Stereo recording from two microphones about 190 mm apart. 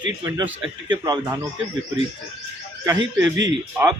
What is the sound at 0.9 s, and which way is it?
Speech, 20° right (ahead or behind).